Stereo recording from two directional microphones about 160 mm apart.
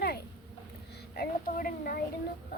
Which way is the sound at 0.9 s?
75° left (ahead or behind).